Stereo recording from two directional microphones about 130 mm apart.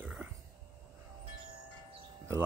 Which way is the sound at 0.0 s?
15° right (ahead or behind).